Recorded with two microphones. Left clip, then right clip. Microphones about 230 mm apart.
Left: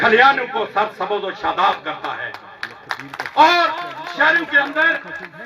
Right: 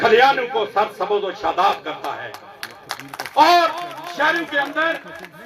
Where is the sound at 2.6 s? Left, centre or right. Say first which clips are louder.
Left 4 dB; centre.